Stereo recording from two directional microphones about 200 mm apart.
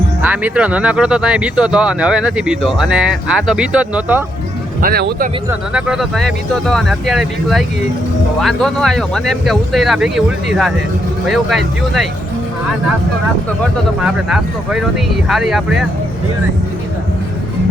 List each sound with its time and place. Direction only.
0.2 s speech: 5° right (ahead or behind)
4.8 s speech: 45° right (ahead or behind)
5.7 s speech: centre (ahead or behind)
14.0 s speech: 5° right (ahead or behind)